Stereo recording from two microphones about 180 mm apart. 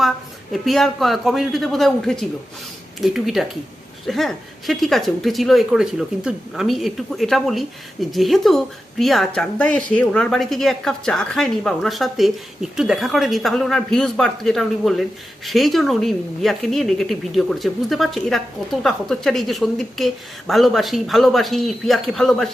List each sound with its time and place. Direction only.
0.5 s speech: centre (ahead or behind)